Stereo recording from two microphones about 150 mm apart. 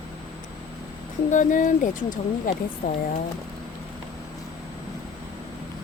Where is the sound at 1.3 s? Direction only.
60° left (ahead or behind).